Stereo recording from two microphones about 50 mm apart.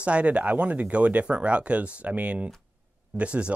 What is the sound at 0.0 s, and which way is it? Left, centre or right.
Speech, right.